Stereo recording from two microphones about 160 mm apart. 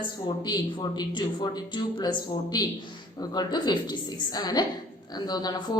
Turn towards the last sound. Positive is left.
turn(degrees=25)  # may be behind; listen again after turning